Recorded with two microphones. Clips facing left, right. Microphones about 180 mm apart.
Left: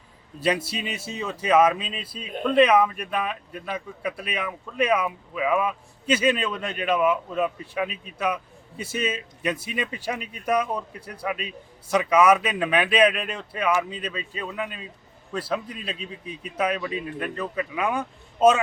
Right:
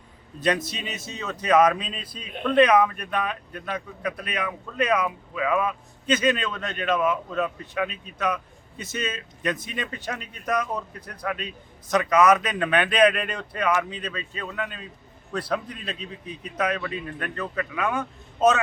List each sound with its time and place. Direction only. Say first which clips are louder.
0.4 s speech: even; 10° left (ahead or behind)